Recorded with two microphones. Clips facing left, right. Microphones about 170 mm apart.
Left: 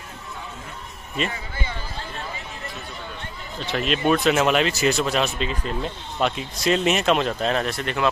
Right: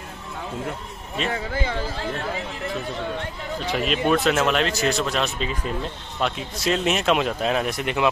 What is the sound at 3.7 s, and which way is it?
Speech, centre (ahead or behind).